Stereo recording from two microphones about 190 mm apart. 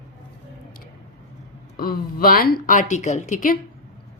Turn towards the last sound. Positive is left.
turn(degrees=40)  # may be behind; listen again after turning